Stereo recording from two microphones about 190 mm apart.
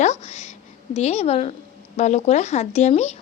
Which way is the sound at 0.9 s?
35° left (ahead or behind).